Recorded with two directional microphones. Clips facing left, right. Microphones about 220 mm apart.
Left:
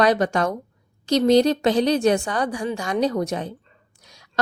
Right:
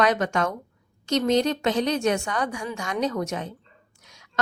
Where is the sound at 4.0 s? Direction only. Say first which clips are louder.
Left 5 dB; 35° left (ahead or behind).